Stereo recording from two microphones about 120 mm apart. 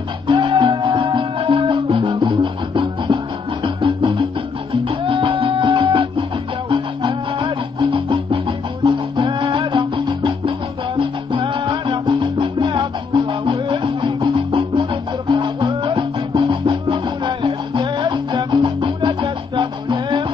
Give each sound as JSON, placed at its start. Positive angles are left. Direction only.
{"t": 0.3, "sound": "music", "side_deg": -40}
{"t": 11.0, "sound": "salsa music", "side_deg": -45}
{"t": 15.3, "sound": "music", "side_deg": -40}